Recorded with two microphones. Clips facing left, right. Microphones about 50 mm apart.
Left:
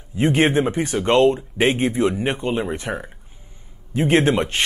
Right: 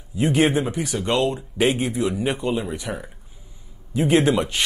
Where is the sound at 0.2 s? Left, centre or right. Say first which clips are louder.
Left 2 dB; left.